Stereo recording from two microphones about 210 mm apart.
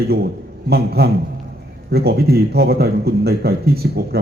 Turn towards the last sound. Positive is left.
turn(degrees=-50)  # may be behind; listen again after turning